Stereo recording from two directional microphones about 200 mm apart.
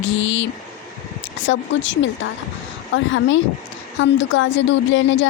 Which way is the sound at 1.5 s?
65° left (ahead or behind).